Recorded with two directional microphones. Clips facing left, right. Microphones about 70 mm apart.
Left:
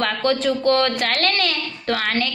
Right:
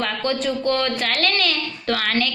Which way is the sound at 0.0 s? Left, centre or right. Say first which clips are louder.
Left 3 dB; left.